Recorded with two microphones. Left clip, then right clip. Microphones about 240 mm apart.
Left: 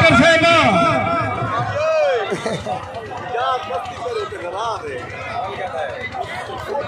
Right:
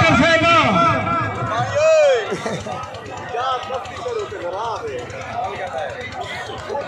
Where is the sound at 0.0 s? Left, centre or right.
Left.